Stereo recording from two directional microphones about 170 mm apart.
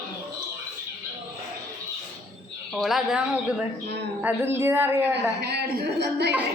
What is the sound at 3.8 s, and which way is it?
Speech, 80° right.